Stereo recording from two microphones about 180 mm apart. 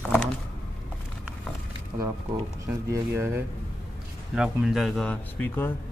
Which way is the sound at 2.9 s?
15° right (ahead or behind).